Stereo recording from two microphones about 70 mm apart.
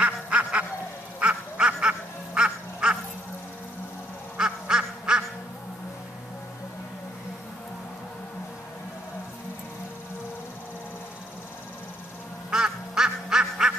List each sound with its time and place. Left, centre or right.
0.0 s quack: centre
4.4 s duck: centre
12.4 s quack: centre